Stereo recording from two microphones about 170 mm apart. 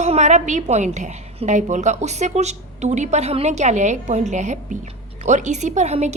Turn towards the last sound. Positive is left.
turn(degrees=-40)  # may be behind; listen again after turning